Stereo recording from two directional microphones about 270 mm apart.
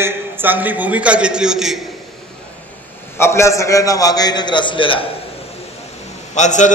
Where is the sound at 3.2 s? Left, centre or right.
Centre.